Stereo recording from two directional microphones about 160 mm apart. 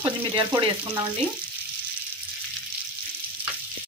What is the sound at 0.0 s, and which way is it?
Frying, 30° right (ahead or behind).